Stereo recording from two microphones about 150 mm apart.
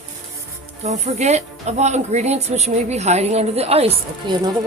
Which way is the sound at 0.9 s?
50° right (ahead or behind).